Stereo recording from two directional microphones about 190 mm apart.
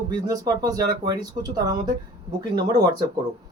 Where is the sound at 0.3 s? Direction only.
20° right (ahead or behind).